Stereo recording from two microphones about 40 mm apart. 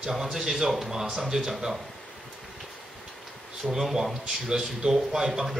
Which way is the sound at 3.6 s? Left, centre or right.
Centre.